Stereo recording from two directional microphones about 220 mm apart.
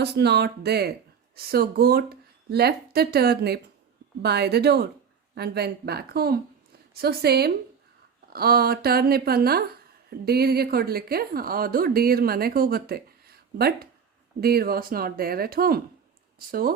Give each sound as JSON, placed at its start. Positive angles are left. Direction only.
{"t": 0.0, "sound": "a woman's voice", "side_deg": -50}